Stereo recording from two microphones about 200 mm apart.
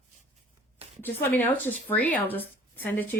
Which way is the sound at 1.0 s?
10° left (ahead or behind).